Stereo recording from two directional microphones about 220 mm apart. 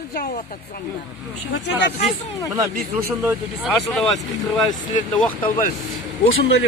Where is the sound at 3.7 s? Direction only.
Centre (ahead or behind).